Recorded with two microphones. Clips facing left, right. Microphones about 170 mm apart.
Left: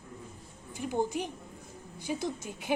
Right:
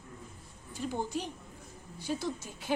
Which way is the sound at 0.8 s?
15° left (ahead or behind).